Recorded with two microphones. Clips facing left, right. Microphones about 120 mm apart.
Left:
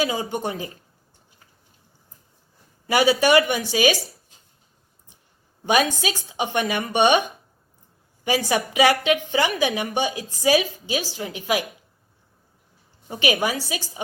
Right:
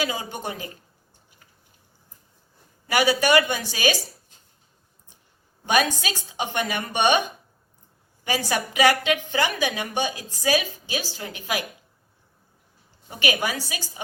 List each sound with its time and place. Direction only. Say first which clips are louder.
0.0 s a woman's voice: left 4 dB; 25° left (ahead or behind)
2.8 s a woman's voice: left 3 dB; 25° left (ahead or behind)
5.6 s a woman's voice: left 2 dB; 20° left (ahead or behind)
13.1 s a woman's voice: left 3 dB; 25° left (ahead or behind)